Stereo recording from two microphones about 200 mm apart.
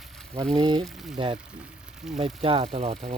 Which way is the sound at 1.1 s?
25° right (ahead or behind).